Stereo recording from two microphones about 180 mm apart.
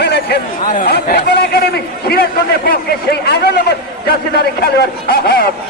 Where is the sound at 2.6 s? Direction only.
60° left (ahead or behind).